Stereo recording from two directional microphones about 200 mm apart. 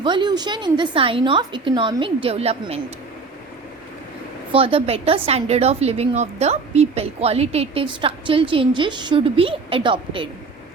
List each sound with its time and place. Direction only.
0.0 s a woman's voice: 25° right (ahead or behind)
4.5 s a woman's voice: 30° right (ahead or behind)